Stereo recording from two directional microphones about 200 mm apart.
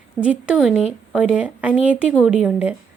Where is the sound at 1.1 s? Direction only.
5° right (ahead or behind).